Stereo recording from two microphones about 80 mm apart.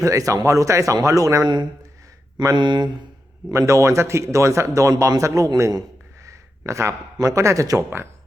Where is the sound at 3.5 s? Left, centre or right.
Right.